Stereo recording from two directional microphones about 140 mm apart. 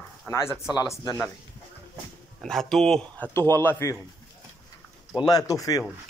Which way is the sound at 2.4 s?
5° left (ahead or behind).